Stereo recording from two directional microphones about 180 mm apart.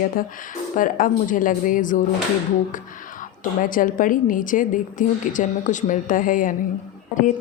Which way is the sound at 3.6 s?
50° left (ahead or behind).